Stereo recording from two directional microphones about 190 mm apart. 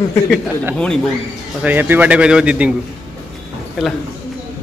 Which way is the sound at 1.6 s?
10° right (ahead or behind).